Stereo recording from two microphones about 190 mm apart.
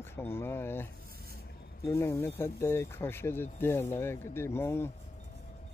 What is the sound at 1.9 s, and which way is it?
Speech, 15° left (ahead or behind).